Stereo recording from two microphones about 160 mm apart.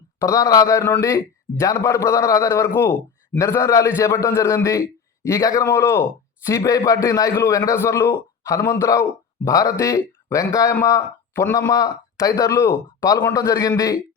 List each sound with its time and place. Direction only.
0.2 s a man's voice: 20° left (ahead or behind)